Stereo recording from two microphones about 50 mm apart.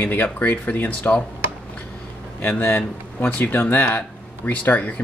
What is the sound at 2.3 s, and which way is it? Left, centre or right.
Speech, left.